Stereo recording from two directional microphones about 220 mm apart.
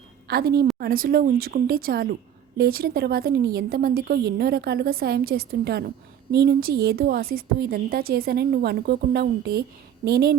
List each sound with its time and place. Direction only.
0.3 s a woman's voice: 45° right (ahead or behind)